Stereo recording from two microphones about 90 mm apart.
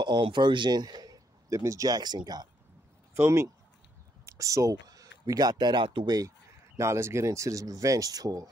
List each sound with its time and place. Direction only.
0.0 s speech: 60° right (ahead or behind)
3.2 s speech: 30° right (ahead or behind); by 5.9 s 55° right (ahead or behind)
6.0 s speech: 45° right (ahead or behind)
6.8 s speech: 30° right (ahead or behind)